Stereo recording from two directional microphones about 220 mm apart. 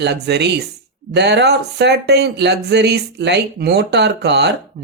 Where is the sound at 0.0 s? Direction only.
50° right (ahead or behind).